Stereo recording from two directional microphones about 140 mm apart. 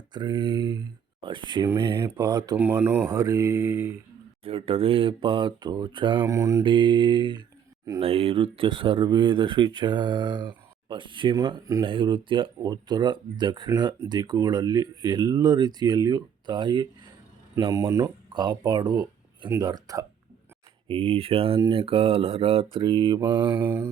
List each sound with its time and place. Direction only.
0.1 s speech: 30° right (ahead or behind)
2.0 s speech: 20° right (ahead or behind)
4.4 s speech: 45° right (ahead or behind)
6.2 s speech: 20° right (ahead or behind)
6.7 s speech: 35° right (ahead or behind)
8.0 s speech: 45° right (ahead or behind)
17.7 s speech: 20° right (ahead or behind)
20.8 s speech: 40° right (ahead or behind)
23.5 s mantra: 15° right (ahead or behind)